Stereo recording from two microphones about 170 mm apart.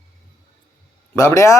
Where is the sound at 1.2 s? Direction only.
15° left (ahead or behind).